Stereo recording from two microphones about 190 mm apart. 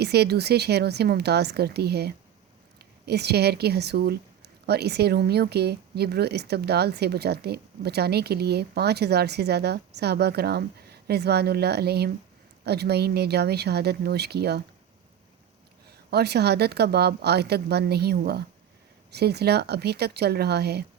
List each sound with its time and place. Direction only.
0.0 s speech: 60° right (ahead or behind)
15.9 s speech: 55° right (ahead or behind)